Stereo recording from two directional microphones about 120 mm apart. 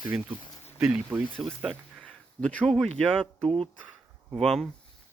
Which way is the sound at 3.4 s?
50° right (ahead or behind).